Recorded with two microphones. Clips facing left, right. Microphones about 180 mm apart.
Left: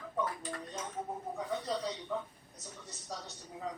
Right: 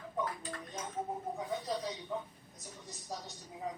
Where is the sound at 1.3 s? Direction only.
15° right (ahead or behind).